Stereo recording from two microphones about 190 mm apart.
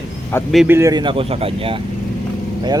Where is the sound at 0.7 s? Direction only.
15° right (ahead or behind).